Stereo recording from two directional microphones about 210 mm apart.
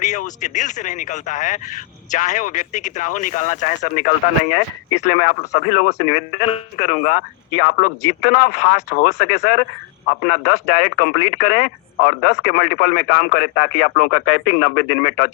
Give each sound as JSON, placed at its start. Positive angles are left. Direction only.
{"t": 0.0, "sound": "speech", "side_deg": 35}